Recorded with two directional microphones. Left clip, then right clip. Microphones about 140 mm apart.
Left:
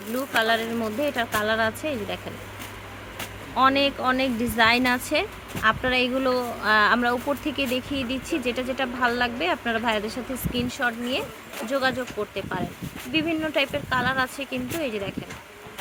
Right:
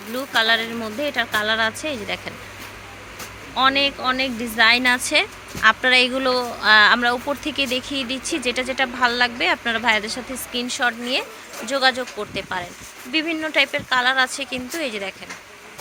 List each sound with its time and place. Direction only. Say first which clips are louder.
0.3 s a woman's voice: right 4 dB; 5° left (ahead or behind)
3.5 s a woman's voice: right 2 dB; 20° left (ahead or behind); by 15.1 s centre (ahead or behind)